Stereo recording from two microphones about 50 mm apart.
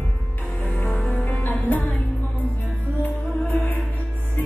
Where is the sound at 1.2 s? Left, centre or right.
Left.